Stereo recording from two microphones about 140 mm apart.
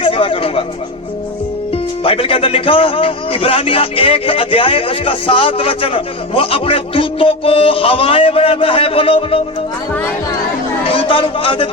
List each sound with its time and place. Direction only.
0.0 s a man's voice: 40° left (ahead or behind)
1.7 s a man's voice: 40° left (ahead or behind)
10.8 s a man's voice: 40° left (ahead or behind)